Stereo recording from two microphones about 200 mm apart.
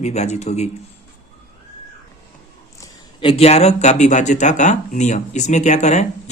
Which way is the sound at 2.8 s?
25° left (ahead or behind).